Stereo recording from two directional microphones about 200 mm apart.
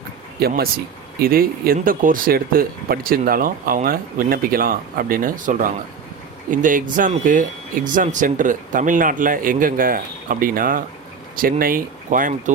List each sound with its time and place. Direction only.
0.3 s speech: 50° right (ahead or behind)